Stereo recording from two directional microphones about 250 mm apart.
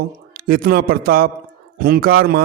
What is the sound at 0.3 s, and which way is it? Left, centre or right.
A man's voice, right.